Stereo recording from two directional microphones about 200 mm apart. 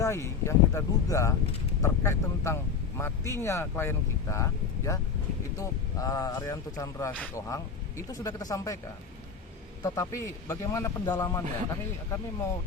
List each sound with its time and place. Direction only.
0.0 s speech: 15° left (ahead or behind)
9.8 s speech: 15° left (ahead or behind)